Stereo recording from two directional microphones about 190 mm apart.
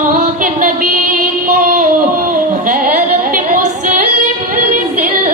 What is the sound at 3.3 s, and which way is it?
Singing, 45° right (ahead or behind).